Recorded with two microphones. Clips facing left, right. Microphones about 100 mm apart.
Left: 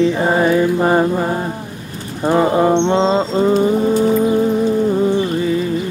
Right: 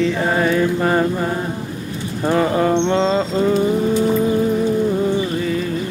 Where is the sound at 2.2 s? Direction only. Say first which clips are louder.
Left 3 dB; 25° left (ahead or behind).